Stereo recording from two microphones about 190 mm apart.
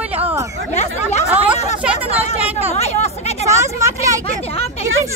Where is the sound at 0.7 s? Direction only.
35° left (ahead or behind).